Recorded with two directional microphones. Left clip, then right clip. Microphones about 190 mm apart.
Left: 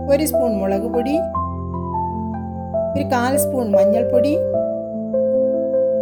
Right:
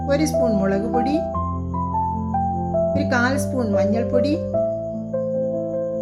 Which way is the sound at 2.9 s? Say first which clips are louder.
Left 2 dB; 40° left (ahead or behind).